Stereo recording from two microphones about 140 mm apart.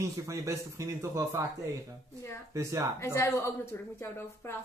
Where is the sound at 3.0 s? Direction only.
20° left (ahead or behind).